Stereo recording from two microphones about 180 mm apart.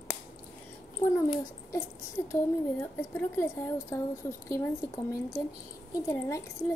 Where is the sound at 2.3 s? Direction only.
15° left (ahead or behind).